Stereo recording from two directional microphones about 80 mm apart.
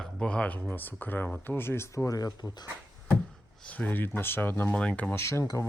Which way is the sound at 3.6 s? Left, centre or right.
Centre.